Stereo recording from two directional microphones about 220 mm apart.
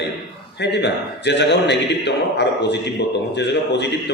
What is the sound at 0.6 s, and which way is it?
A man's voice, 50° left (ahead or behind).